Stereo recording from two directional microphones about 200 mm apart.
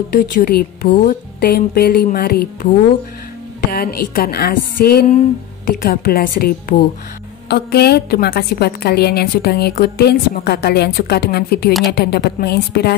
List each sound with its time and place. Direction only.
0.1 s a woman's voice: 45° left (ahead or behind)
3.7 s a woman's voice: 50° left (ahead or behind)